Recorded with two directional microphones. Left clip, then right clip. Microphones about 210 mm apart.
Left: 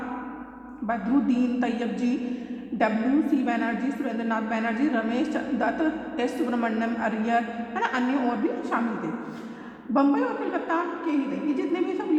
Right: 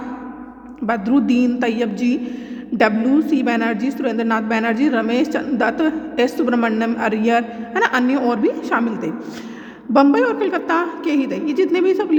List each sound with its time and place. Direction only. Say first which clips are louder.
0.9 s a woman's voice: right 7 dB; 30° right (ahead or behind)